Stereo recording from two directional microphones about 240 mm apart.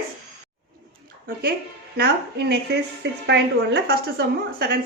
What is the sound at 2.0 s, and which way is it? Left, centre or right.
A woman's voice, right.